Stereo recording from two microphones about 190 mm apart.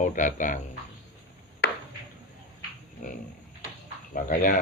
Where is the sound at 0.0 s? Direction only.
40° left (ahead or behind).